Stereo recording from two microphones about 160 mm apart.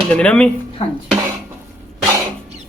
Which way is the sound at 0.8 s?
40° left (ahead or behind).